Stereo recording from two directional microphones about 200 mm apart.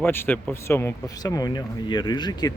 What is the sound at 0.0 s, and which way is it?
Speech, 10° left (ahead or behind).